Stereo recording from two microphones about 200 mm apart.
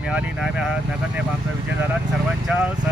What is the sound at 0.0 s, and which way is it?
Speech, 5° right (ahead or behind).